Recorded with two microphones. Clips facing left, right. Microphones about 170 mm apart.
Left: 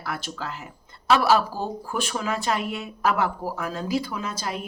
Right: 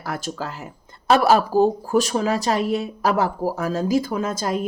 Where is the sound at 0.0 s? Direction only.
40° right (ahead or behind).